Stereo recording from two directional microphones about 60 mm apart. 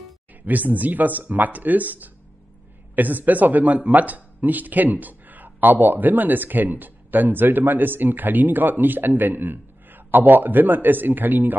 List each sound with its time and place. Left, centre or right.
0.4 s speech: right